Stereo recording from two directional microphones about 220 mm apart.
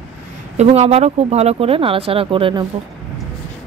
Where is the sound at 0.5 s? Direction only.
30° right (ahead or behind).